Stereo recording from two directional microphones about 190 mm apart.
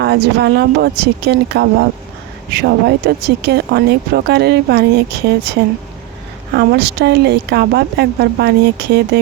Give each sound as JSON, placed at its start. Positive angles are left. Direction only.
{"t": 0.0, "sound": "speech", "side_deg": -60}